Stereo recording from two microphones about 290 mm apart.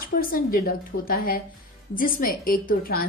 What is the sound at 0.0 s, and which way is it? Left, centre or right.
A woman's voice, left.